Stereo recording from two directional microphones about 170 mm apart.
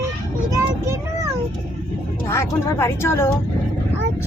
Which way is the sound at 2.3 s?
15° left (ahead or behind).